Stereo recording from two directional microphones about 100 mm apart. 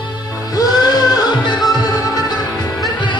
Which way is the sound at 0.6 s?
45° left (ahead or behind).